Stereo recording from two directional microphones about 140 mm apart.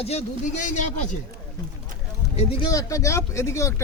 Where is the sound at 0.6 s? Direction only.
60° left (ahead or behind).